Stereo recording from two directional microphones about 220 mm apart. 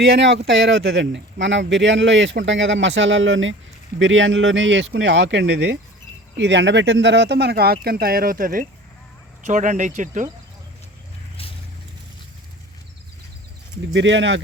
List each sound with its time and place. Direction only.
0.0 s speech: 50° right (ahead or behind); by 10.2 s 35° right (ahead or behind)
13.9 s speech: 55° right (ahead or behind)